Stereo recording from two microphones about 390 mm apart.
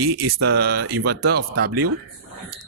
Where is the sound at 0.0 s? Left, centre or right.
Right.